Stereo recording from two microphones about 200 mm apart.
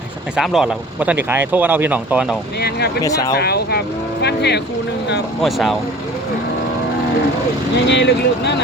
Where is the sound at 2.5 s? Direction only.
55° left (ahead or behind).